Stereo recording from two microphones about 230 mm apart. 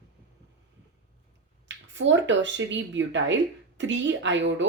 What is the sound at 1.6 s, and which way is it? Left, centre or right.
Speech, right.